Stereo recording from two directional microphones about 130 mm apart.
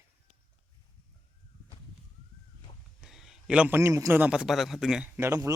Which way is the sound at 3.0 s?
5° right (ahead or behind).